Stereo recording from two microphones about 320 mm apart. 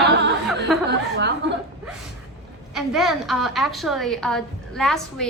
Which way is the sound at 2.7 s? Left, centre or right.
Centre.